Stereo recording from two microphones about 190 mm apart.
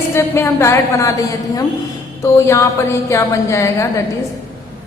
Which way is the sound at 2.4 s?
15° left (ahead or behind).